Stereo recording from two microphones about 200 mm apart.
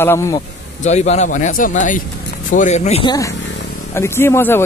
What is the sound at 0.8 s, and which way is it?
A man's voice, 35° left (ahead or behind).